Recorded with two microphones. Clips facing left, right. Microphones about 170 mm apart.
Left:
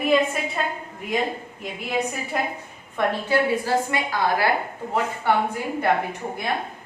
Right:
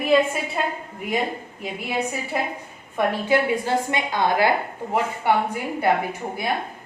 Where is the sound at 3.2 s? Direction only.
20° right (ahead or behind).